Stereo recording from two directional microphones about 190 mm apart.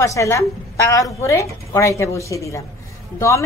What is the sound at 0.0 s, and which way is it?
A woman's voice, 15° left (ahead or behind).